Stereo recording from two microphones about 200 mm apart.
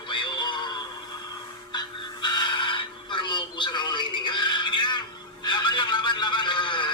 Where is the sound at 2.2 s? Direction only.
20° left (ahead or behind).